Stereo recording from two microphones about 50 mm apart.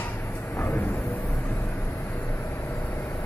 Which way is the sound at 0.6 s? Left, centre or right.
Left.